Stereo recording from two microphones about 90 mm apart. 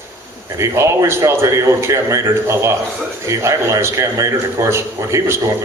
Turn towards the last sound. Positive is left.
turn(degrees=-30)  # may be behind; listen again after turning